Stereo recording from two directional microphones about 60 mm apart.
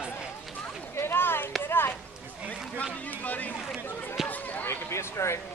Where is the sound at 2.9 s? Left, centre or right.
Left.